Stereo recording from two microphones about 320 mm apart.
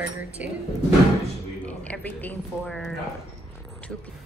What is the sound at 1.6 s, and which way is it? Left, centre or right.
Speech, centre.